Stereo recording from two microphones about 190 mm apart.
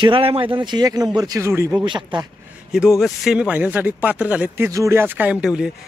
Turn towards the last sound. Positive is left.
turn(degrees=-5)  # may be behind; listen again after turning